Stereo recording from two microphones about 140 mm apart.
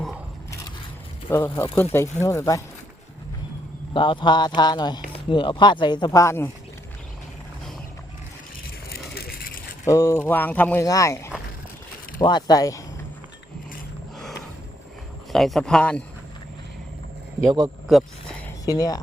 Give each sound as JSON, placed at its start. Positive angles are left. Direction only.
{"t": 1.3, "sound": "speech", "side_deg": 15}
{"t": 3.9, "sound": "speech", "side_deg": 35}
{"t": 9.8, "sound": "speech", "side_deg": 20}
{"t": 10.8, "sound": "speech", "side_deg": 25}
{"t": 15.3, "sound": "speech", "side_deg": 0}
{"t": 17.4, "sound": "speech", "side_deg": -30}
{"t": 17.9, "sound": "speech", "side_deg": -5}
{"t": 18.6, "sound": "speech", "side_deg": 25}